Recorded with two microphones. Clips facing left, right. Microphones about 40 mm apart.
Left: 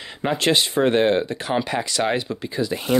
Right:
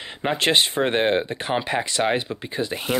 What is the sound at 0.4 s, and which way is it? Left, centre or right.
Speech, right.